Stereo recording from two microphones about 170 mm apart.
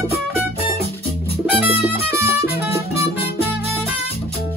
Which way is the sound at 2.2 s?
15° right (ahead or behind).